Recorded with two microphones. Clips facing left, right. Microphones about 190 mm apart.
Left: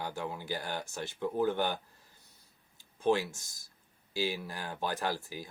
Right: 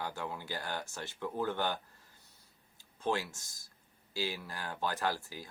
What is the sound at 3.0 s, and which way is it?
Speech, 15° left (ahead or behind).